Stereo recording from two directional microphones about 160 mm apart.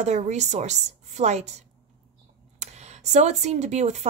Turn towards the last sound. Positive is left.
turn(degrees=-45)  # may be behind; listen again after turning